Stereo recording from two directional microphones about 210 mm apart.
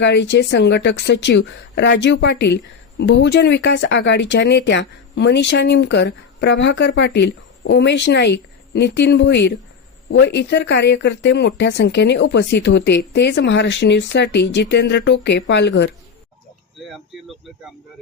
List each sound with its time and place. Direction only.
0.0 s speech: 60° left (ahead or behind)
16.8 s speech: centre (ahead or behind)